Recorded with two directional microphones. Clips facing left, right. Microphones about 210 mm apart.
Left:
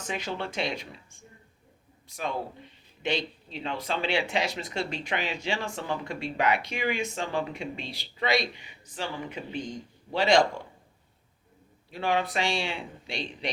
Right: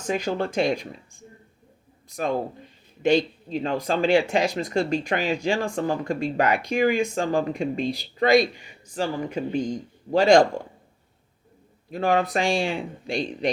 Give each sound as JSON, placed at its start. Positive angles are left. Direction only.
{"t": 0.1, "sound": "speech", "side_deg": -45}
{"t": 2.1, "sound": "speech", "side_deg": -45}
{"t": 11.9, "sound": "speech", "side_deg": -45}